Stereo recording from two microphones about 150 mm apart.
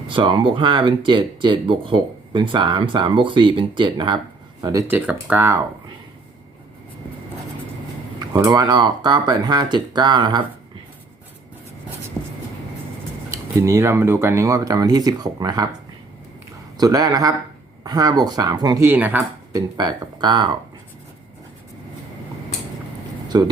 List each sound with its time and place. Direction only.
0.1 s speech: 35° right (ahead or behind)
4.9 s speech: 10° right (ahead or behind)
8.2 s speech: 25° right (ahead or behind)
13.3 s speech: 20° right (ahead or behind)
16.7 s speech: 25° right (ahead or behind)
18.9 s speech: 10° right (ahead or behind)
19.5 s speech: 30° right (ahead or behind)
23.3 s speech: 25° right (ahead or behind)